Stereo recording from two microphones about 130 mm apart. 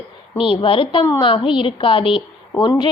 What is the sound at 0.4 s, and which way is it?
A woman's voice, 45° left (ahead or behind).